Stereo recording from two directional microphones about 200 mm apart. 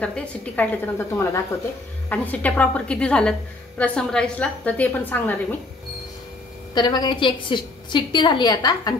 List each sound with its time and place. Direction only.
0.0 s a woman's voice: 5° left (ahead or behind)
6.7 s a woman's voice: 20° left (ahead or behind)